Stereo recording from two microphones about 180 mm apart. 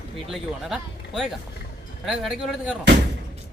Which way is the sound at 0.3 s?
Centre (ahead or behind).